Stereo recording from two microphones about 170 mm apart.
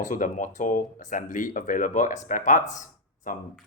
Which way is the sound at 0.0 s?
50° left (ahead or behind).